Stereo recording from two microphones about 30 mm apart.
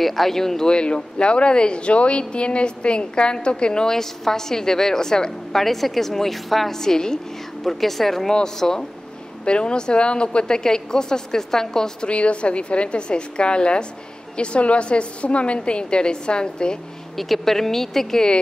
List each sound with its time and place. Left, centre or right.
0.0 s a woman's voice: centre
0.7 s speech: left
3.9 s a woman's voice: centre
5.6 s a woman's voice: centre
6.7 s a woman's voice: centre
7.6 s a woman's voice: centre
8.5 s a woman's voice: centre
9.4 s speech: left
10.6 s a woman's voice: left
12.1 s speech: left
17.2 s a woman's voice: centre